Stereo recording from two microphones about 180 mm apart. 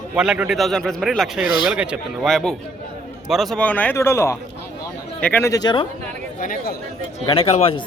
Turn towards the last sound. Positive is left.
turn(degrees=35)  # may be behind; listen again after turning